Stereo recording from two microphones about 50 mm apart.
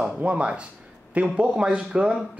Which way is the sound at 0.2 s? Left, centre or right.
Right.